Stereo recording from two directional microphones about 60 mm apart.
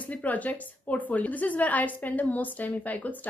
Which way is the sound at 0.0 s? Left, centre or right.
Left.